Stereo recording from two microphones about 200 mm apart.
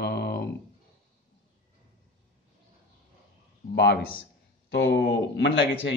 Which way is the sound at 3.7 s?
55° left (ahead or behind).